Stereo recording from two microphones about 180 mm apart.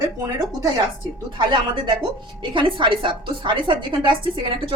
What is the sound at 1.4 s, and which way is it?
A woman's voice, 25° right (ahead or behind).